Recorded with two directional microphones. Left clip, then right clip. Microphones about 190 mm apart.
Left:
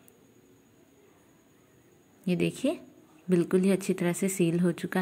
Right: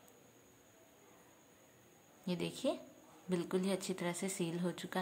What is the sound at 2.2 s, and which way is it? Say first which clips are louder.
Speech: left 10 dB; 20° left (ahead or behind).